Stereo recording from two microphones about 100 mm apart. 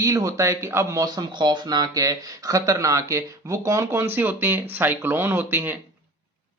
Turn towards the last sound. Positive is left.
turn(degrees=-20)  # may be behind; listen again after turning